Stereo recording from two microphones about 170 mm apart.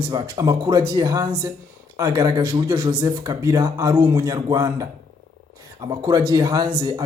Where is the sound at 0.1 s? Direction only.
20° right (ahead or behind).